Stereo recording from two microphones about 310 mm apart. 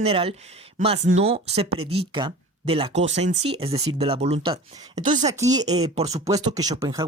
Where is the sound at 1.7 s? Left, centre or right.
Right.